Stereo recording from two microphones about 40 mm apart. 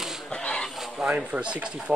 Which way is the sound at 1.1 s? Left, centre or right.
Right.